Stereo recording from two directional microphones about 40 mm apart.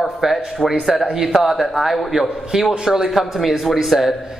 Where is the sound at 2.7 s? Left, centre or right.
Centre.